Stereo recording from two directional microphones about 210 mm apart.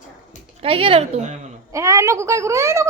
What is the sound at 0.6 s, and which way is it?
Speech, 25° right (ahead or behind).